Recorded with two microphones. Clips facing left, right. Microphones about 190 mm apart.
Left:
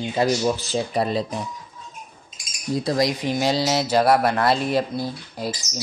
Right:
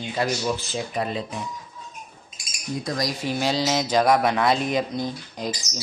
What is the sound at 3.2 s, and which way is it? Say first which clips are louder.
Speech: left 2 dB; 10° left (ahead or behind).